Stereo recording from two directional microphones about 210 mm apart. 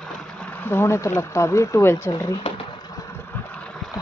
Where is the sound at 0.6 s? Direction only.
10° left (ahead or behind).